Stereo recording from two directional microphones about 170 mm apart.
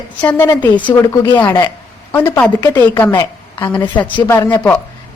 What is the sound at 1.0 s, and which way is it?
Speech, 25° left (ahead or behind).